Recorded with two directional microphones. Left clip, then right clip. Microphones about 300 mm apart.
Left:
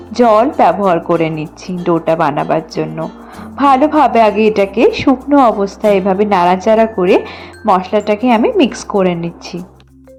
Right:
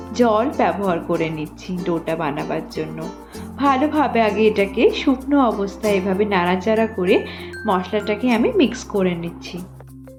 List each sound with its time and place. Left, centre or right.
0.1 s a woman's voice: centre